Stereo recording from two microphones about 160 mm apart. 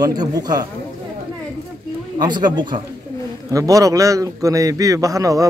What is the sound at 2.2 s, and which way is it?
A man's voice, 25° right (ahead or behind).